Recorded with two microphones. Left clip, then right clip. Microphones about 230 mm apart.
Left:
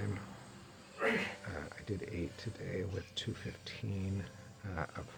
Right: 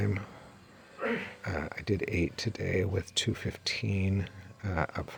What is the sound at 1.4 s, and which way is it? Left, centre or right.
Speech, right.